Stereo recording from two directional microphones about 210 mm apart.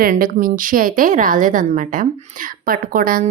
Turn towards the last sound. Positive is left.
turn(degrees=-40)  # may be behind; listen again after turning